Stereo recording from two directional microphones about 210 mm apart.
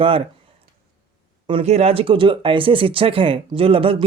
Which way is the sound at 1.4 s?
25° right (ahead or behind).